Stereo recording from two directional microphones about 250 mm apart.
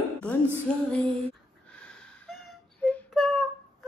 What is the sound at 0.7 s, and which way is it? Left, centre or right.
Female singing, centre.